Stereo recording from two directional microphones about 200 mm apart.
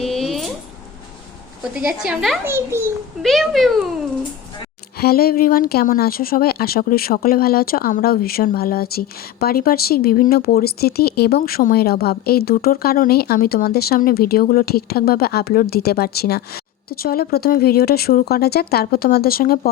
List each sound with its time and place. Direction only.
0.0 s a sound: centre (ahead or behind)
1.7 s a woman's voice: 5° right (ahead or behind)
3.2 s a child's voice: centre (ahead or behind)
4.9 s speech: 50° left (ahead or behind)